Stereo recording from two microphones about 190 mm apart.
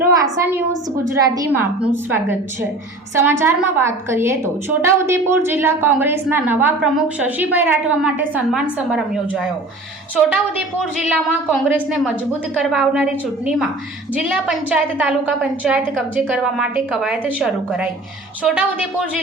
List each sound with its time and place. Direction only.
0.0 s a sound: 15° right (ahead or behind)
1.1 s a woman's voice: 15° right (ahead or behind); by 9.5 s centre (ahead or behind)
10.9 s a woman's voice: 5° right (ahead or behind)